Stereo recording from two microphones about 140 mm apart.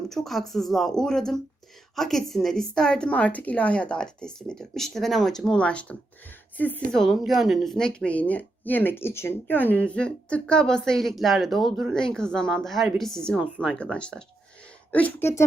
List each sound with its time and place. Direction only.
0.1 s a woman's voice: centre (ahead or behind)
6.9 s a woman's voice: centre (ahead or behind); by 15.4 s 20° left (ahead or behind)